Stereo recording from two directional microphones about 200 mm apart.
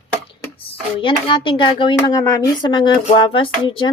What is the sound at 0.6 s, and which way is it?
Speech, 25° left (ahead or behind).